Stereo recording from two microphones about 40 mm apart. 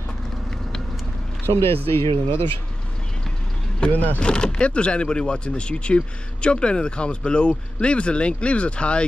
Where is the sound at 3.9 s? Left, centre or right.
Left.